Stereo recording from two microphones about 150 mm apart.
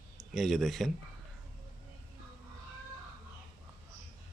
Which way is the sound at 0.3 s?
Centre (ahead or behind).